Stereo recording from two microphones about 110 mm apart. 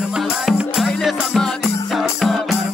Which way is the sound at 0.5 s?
Centre (ahead or behind).